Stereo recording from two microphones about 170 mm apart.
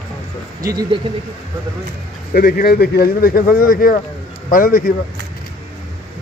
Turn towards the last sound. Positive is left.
turn(degrees=55)  # may be behind; listen again after turning